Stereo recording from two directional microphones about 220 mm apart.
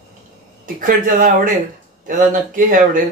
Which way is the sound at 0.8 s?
35° right (ahead or behind).